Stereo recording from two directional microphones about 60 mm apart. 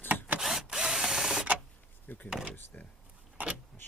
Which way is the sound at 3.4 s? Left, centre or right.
Right.